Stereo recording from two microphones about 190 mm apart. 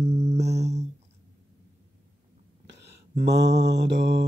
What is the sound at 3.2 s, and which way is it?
Mantra, 65° right (ahead or behind).